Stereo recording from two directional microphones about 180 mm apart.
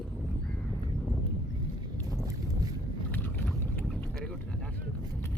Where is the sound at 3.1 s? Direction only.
10° left (ahead or behind).